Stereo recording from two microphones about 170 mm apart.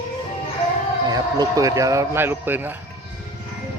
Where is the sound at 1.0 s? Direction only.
20° right (ahead or behind).